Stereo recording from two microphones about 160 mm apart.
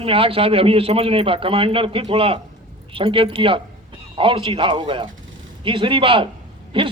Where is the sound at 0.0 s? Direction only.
35° right (ahead or behind).